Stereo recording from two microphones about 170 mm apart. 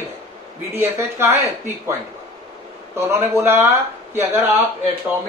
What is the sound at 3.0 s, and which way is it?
Speech, 15° right (ahead or behind).